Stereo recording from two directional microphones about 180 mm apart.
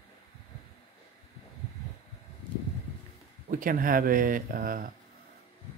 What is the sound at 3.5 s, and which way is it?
Speech, 50° right (ahead or behind).